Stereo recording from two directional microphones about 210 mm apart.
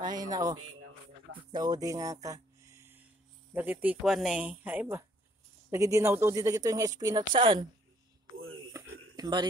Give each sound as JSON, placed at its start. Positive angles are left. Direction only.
{"t": 0.0, "sound": "speech", "side_deg": -20}
{"t": 1.3, "sound": "a sound", "side_deg": -20}
{"t": 3.5, "sound": "speech", "side_deg": -10}
{"t": 9.1, "sound": "speech", "side_deg": -20}